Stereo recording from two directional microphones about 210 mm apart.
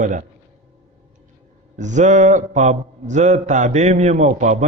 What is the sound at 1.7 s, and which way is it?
A man's voice, 35° right (ahead or behind).